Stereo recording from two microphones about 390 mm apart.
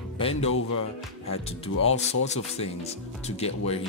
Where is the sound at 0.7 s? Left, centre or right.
Left.